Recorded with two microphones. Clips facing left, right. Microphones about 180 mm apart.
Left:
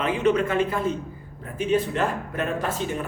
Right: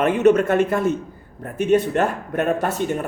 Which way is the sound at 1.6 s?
65° right (ahead or behind).